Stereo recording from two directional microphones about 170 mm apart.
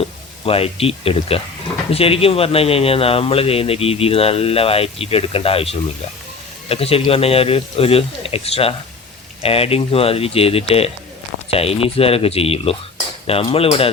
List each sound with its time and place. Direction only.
0.0 s a man's voice: 35° left (ahead or behind)